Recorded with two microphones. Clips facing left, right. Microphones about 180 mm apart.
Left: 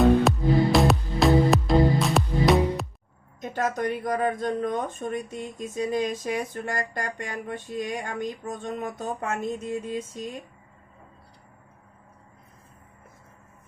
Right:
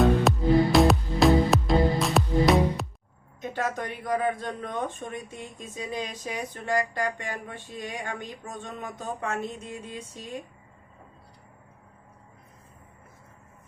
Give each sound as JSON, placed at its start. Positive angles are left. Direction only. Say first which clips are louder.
{"t": 0.0, "sound": "music", "louder": "left 2 dB", "side_deg": 0}
{"t": 3.4, "sound": "speech", "louder": "left 4 dB", "side_deg": 45}